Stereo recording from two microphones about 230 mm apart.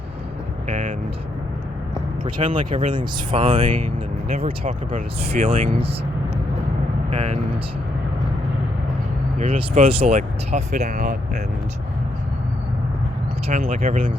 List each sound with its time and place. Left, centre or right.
0.7 s vehicle: right
2.2 s speech: centre
3.4 s speech: right
7.1 s speech: right
9.4 s speech: right
13.5 s speech: right